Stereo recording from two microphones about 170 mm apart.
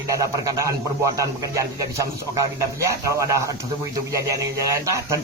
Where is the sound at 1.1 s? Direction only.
20° right (ahead or behind).